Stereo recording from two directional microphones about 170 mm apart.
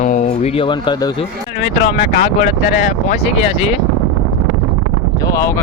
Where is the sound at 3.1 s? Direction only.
40° left (ahead or behind).